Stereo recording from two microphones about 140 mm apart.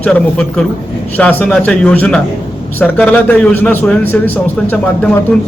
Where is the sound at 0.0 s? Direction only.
10° left (ahead or behind).